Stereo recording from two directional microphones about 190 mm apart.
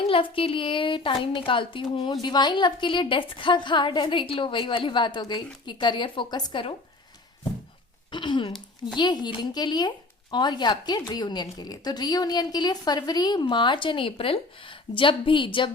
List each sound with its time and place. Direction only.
0.0 s speech: 30° left (ahead or behind)
8.1 s speech: 25° left (ahead or behind)